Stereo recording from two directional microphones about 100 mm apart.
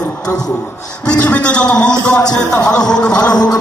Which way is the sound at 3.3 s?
40° left (ahead or behind).